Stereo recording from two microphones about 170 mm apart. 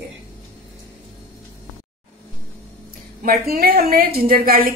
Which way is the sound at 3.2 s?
60° right (ahead or behind).